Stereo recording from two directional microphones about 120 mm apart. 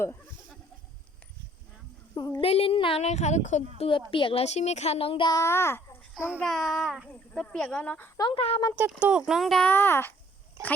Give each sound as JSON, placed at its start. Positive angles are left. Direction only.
{"t": 2.1, "sound": "speech", "side_deg": 30}
{"t": 2.4, "sound": "a woman's voice", "side_deg": 55}
{"t": 3.0, "sound": "a woman's voice", "side_deg": 75}
{"t": 3.8, "sound": "a woman's voice", "side_deg": 45}
{"t": 5.3, "sound": "a child's voice", "side_deg": 25}
{"t": 6.4, "sound": "a child's voice", "side_deg": 0}
{"t": 8.4, "sound": "a woman's voice", "side_deg": 50}
{"t": 9.0, "sound": "speech", "side_deg": -10}
{"t": 9.2, "sound": "a child's voice", "side_deg": 0}
{"t": 9.6, "sound": "speech", "side_deg": 20}